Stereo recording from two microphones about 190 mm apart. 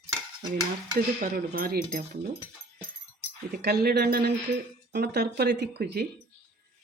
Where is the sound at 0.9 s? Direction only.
50° right (ahead or behind).